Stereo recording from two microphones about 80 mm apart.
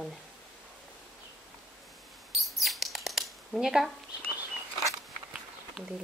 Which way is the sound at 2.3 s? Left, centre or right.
Centre.